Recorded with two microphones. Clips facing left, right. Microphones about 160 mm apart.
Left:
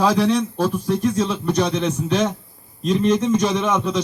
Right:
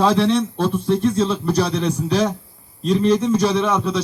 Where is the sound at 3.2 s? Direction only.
35° right (ahead or behind).